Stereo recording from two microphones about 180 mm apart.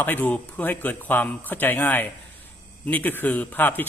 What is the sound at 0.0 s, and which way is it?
Speech, 10° left (ahead or behind).